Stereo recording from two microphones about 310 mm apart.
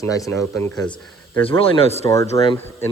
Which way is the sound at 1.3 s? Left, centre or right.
Centre.